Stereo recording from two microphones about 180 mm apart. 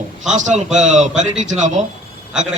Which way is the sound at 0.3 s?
40° right (ahead or behind).